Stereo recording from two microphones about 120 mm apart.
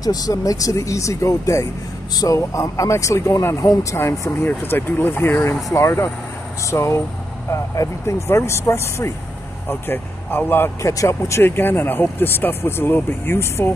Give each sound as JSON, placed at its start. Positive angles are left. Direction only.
{"t": 0.0, "sound": "speech", "side_deg": 30}